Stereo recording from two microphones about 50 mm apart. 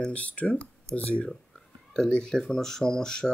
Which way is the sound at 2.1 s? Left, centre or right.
Centre.